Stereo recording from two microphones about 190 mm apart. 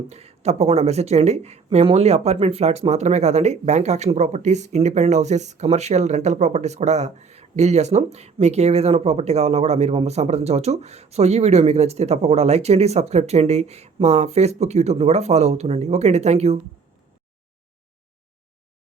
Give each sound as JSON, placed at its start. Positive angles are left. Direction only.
{"t": 0.1, "sound": "speech", "side_deg": -35}